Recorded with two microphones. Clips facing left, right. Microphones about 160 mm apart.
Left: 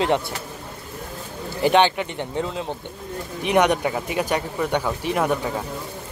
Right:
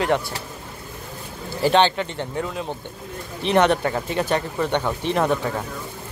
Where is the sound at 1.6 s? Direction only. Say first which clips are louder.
Even; 15° left (ahead or behind).